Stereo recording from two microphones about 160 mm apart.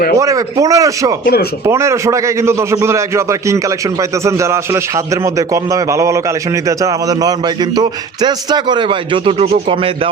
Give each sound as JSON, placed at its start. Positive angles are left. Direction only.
{"t": 0.2, "sound": "speech", "side_deg": -20}
{"t": 1.2, "sound": "speech", "side_deg": 75}
{"t": 1.6, "sound": "a man's voice", "side_deg": -20}